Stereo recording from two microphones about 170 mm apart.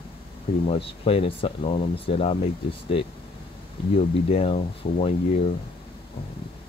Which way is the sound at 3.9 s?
35° left (ahead or behind).